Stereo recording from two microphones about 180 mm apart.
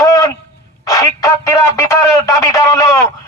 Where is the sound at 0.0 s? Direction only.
20° left (ahead or behind).